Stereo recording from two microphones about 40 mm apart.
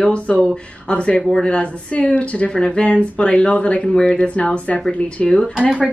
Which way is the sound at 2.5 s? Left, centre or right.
Left.